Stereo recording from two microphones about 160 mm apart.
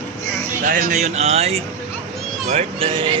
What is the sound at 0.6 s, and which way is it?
Speech, 55° right (ahead or behind).